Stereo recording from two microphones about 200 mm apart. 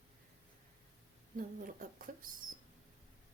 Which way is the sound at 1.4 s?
45° right (ahead or behind).